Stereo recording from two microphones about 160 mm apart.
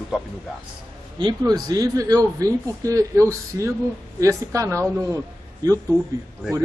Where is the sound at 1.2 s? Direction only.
25° right (ahead or behind).